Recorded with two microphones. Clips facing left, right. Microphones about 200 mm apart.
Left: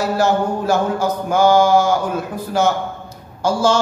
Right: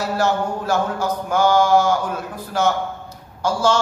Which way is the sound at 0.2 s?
5° left (ahead or behind).